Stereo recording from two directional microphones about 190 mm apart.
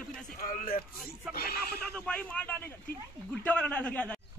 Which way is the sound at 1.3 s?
55° left (ahead or behind).